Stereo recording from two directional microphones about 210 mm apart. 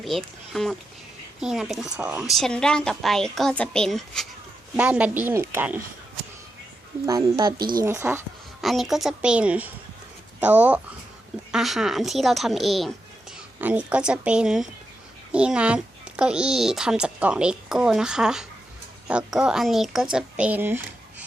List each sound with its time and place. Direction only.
0.0 s a woman's voice: centre (ahead or behind)
7.0 s a woman's voice: 20° right (ahead or behind)
8.6 s a woman's voice: centre (ahead or behind)